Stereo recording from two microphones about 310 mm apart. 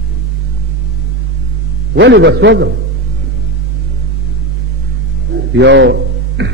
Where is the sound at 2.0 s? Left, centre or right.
Right.